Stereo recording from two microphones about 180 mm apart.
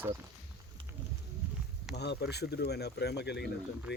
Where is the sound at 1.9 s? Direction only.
70° left (ahead or behind).